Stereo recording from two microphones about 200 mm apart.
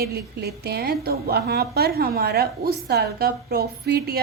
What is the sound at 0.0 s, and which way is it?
A woman's voice, 55° right (ahead or behind).